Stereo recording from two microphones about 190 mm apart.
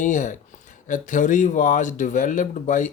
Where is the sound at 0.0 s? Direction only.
40° left (ahead or behind).